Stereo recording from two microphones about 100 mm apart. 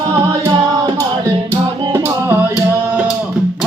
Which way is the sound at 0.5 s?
40° right (ahead or behind).